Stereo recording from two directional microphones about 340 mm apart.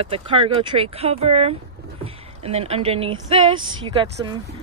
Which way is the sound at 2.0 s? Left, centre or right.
Centre.